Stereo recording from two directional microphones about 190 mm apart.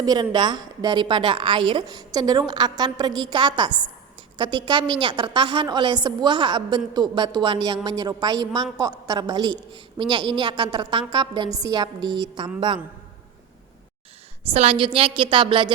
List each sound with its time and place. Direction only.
0.0 s a woman's voice: 20° right (ahead or behind)
14.5 s a woman's voice: 30° right (ahead or behind)